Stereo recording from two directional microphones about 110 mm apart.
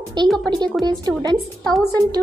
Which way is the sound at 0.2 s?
40° right (ahead or behind).